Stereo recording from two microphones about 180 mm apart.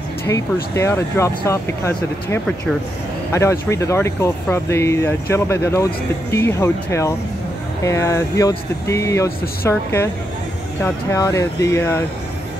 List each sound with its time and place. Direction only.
0.2 s speech: 15° left (ahead or behind)